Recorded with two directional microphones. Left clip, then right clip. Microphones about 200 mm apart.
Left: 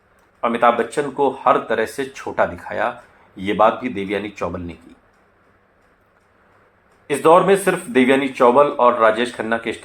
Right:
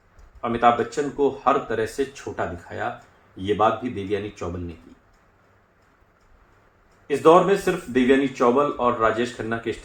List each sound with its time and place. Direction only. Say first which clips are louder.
0.4 s speech: left 3 dB; 30° left (ahead or behind)
7.1 s speech: left 3 dB; 35° left (ahead or behind)